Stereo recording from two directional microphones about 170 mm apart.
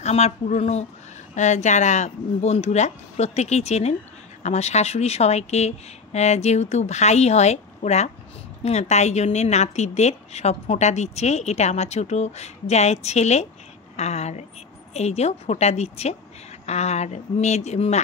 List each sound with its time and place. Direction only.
0.0 s a woman's voice: 40° left (ahead or behind)